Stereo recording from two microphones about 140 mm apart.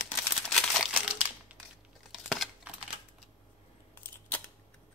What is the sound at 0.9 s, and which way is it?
Crumpling, 10° right (ahead or behind).